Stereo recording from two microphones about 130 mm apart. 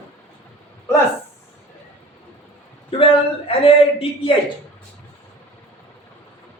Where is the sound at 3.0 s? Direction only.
45° left (ahead or behind).